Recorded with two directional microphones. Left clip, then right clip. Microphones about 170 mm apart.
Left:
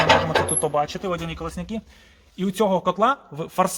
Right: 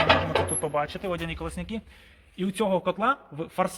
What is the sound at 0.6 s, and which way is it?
A man's voice, 35° left (ahead or behind).